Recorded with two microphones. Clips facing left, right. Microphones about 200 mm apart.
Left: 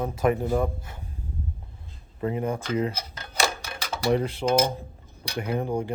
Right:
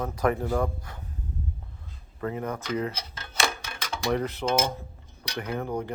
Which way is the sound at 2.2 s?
20° left (ahead or behind).